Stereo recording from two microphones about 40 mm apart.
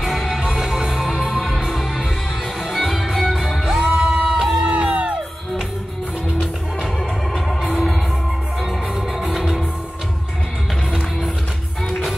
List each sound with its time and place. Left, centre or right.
0.0 s music: centre
1.0 s music: centre; by 4.4 s right
4.4 s crowd: centre
4.6 s music: right
9.3 s music: centre